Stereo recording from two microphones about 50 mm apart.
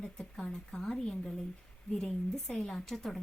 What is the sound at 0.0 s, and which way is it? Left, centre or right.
A woman's voice, centre.